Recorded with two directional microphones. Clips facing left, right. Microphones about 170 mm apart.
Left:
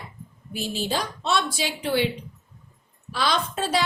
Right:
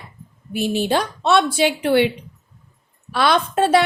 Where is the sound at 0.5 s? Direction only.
60° right (ahead or behind).